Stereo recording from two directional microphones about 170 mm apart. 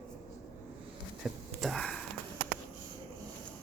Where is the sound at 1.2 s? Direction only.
Centre (ahead or behind).